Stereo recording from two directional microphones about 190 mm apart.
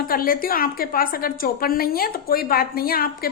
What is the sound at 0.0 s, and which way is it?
A woman's voice, 50° left (ahead or behind).